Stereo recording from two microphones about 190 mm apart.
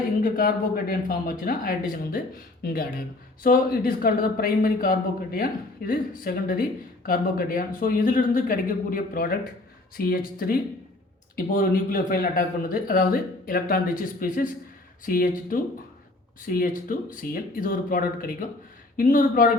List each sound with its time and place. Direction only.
0.2 s speech: 45° left (ahead or behind)
3.4 s speech: 50° left (ahead or behind)